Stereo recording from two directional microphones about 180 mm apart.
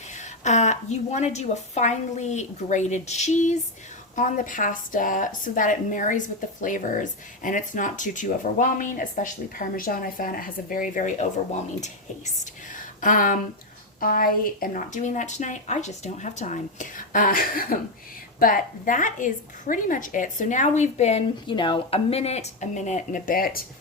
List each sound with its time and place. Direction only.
0.4 s a woman's voice: 40° left (ahead or behind)